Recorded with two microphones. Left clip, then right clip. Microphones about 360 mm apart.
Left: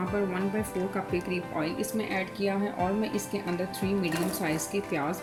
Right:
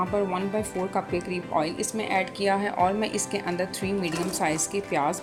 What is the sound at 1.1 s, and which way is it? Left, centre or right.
Speech, centre.